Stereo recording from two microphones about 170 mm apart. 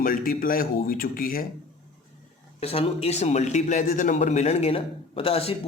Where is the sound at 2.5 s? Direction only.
35° left (ahead or behind).